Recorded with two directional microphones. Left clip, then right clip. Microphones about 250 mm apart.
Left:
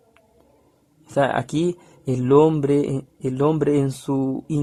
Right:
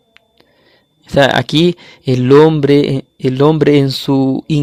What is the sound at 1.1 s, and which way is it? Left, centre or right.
Speech, right.